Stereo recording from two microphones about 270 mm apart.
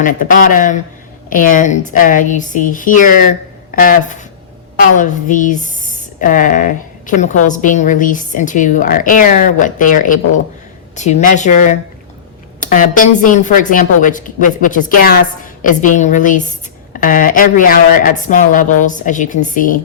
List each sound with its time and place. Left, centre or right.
0.0 s a woman's voice: left